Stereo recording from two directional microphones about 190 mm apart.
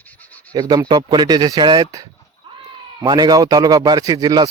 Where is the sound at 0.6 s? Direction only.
20° right (ahead or behind).